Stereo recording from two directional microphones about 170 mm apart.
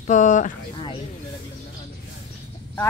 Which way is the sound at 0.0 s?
45° left (ahead or behind).